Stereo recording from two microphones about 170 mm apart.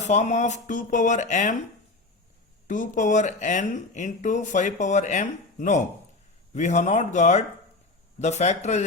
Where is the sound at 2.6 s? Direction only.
50° left (ahead or behind).